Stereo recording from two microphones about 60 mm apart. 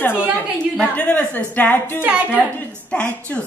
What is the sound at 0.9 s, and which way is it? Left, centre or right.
Speech, left.